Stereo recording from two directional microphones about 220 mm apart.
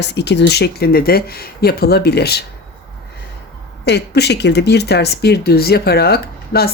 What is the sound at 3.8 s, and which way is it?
Speech, 50° left (ahead or behind).